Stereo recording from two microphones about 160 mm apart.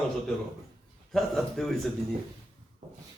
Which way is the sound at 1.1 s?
Centre (ahead or behind).